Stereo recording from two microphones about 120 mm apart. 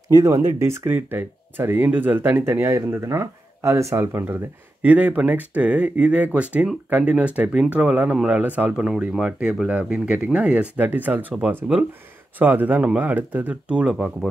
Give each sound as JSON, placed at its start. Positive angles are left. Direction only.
{"t": 0.1, "sound": "speech", "side_deg": -30}